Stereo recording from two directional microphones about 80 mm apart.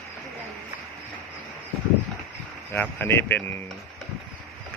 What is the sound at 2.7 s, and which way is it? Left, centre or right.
Speech, left.